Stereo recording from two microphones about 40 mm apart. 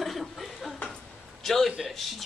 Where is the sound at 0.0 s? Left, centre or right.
Centre.